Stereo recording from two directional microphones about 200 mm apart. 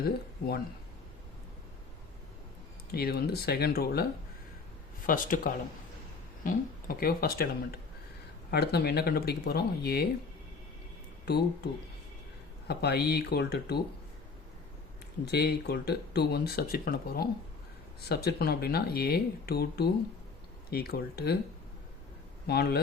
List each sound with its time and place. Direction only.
0.0 s speech: 50° left (ahead or behind)
2.9 s speech: 50° left (ahead or behind)
5.0 s speech: 45° left (ahead or behind)
11.3 s speech: 55° left (ahead or behind)
15.2 s speech: 55° left (ahead or behind)
22.4 s speech: 50° left (ahead or behind)